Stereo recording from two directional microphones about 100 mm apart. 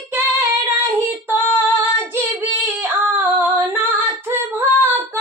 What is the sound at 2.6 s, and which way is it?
Singing, 20° right (ahead or behind).